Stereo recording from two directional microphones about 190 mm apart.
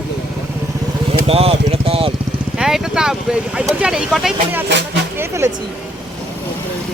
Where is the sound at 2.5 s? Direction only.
Centre (ahead or behind).